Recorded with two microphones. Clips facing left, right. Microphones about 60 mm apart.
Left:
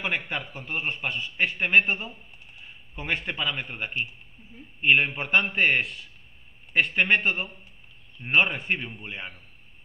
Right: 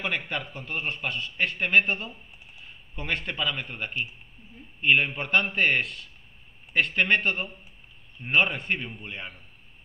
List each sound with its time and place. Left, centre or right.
0.0 s speech: centre
0.5 s a man's voice: centre
3.2 s a man's voice: centre
4.8 s a man's voice: centre
8.2 s a man's voice: centre